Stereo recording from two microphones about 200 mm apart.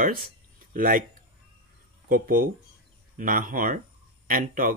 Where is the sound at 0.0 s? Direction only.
45° right (ahead or behind).